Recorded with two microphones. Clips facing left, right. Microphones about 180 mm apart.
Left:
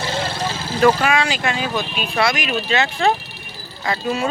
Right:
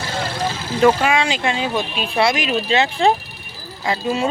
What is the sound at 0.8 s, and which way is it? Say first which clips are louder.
Speech: right 1 dB; 20° right (ahead or behind).